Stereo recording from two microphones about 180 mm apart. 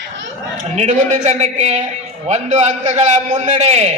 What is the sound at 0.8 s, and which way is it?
A man's voice, 45° right (ahead or behind).